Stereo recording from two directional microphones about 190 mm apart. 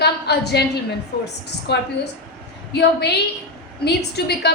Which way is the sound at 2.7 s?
60° left (ahead or behind).